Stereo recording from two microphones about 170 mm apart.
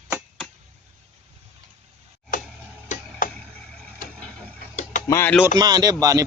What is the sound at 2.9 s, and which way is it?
Tick-tock, 50° left (ahead or behind).